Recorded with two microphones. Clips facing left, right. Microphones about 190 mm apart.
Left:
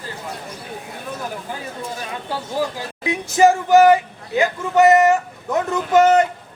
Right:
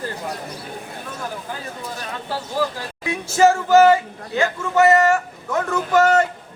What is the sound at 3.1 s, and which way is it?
Speech, 15° left (ahead or behind).